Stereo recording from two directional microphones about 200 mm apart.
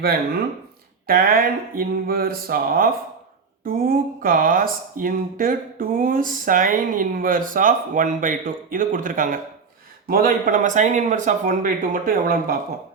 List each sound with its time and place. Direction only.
1.0 s speech: 45° right (ahead or behind)